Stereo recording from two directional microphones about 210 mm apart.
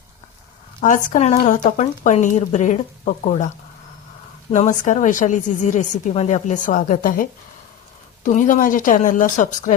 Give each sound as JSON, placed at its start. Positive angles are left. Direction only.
{"t": 0.8, "sound": "speech", "side_deg": 40}
{"t": 4.5, "sound": "speech", "side_deg": 35}